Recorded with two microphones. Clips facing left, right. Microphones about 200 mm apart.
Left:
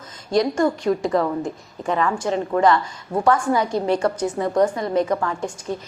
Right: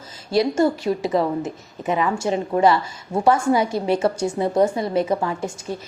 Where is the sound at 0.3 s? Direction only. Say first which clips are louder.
Right 1 dB; 5° right (ahead or behind).